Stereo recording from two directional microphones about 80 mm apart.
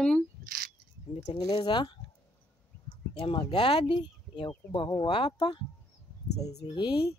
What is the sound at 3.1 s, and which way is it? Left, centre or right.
Speech, left.